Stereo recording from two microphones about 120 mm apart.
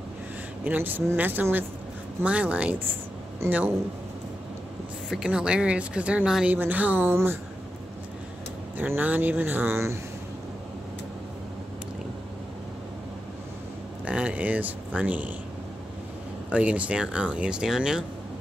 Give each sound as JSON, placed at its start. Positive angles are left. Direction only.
{"t": 0.7, "sound": "speech", "side_deg": -15}
{"t": 5.1, "sound": "speech", "side_deg": -5}
{"t": 8.7, "sound": "speech", "side_deg": -15}
{"t": 14.0, "sound": "speech", "side_deg": -10}
{"t": 16.4, "sound": "speech", "side_deg": -10}